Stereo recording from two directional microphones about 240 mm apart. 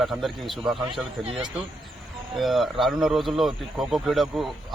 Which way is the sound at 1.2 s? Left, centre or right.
Right.